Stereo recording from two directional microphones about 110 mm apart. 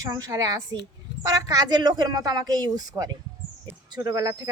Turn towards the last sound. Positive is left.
turn(degrees=-35)  # may be behind; listen again after turning